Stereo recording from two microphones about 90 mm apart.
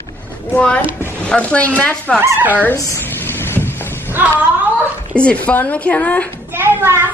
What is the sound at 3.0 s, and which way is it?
Vehicle, 25° left (ahead or behind).